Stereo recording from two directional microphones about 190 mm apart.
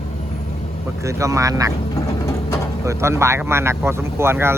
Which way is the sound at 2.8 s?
15° right (ahead or behind).